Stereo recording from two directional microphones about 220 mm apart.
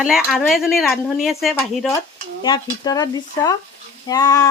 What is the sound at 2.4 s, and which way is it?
Speech, 20° left (ahead or behind).